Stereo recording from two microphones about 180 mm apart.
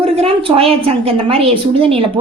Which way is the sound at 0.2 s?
30° right (ahead or behind).